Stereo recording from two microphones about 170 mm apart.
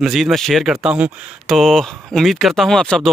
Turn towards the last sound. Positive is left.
turn(degrees=5)  # may be behind; listen again after turning